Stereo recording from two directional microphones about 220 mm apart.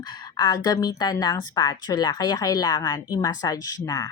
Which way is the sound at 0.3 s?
20° left (ahead or behind).